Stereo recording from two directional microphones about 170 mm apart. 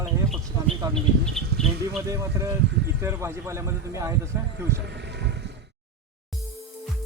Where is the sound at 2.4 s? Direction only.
20° right (ahead or behind).